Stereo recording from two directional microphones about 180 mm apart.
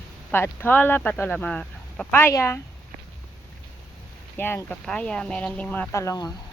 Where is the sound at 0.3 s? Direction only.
10° left (ahead or behind).